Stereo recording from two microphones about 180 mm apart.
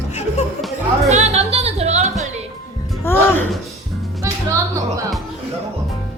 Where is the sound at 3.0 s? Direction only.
15° left (ahead or behind).